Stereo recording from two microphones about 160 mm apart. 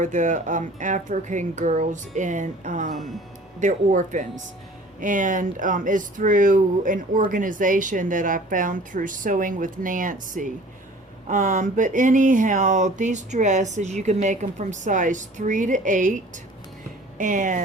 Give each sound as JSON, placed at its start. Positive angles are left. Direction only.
{"t": 0.0, "sound": "speech", "side_deg": -50}